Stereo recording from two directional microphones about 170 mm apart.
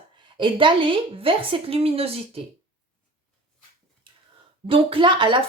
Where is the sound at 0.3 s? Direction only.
30° right (ahead or behind).